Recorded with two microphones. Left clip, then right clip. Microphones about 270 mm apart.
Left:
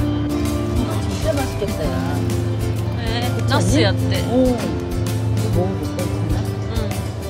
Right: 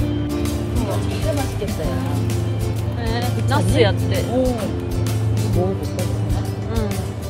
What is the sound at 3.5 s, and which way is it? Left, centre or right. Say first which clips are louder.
Speech: right 1 dB; centre.